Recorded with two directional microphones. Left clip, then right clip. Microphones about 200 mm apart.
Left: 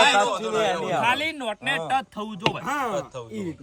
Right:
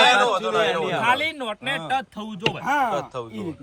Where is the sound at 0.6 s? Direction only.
45° left (ahead or behind).